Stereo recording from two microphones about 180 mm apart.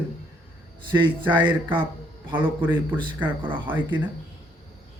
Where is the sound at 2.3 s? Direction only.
10° right (ahead or behind).